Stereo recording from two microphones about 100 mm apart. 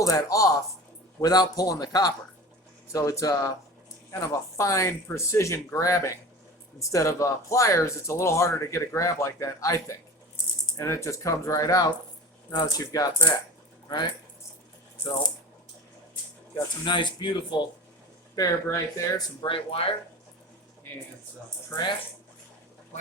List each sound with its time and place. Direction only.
0.0 s speech: 35° left (ahead or behind)
16.8 s speech: 50° left (ahead or behind)
19.5 s speech: 65° left (ahead or behind)